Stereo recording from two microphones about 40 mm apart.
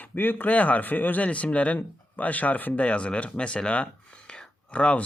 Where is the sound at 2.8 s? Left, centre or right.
Left.